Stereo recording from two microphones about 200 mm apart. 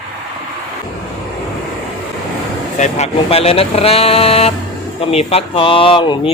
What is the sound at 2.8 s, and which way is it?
Speech, 35° left (ahead or behind).